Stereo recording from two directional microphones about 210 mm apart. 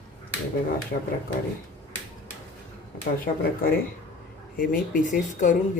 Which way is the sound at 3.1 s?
45° left (ahead or behind).